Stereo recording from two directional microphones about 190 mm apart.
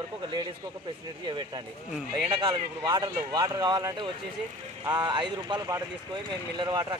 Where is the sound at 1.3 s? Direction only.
25° right (ahead or behind).